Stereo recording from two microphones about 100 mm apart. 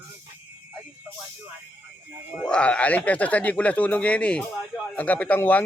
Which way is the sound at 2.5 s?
10° left (ahead or behind).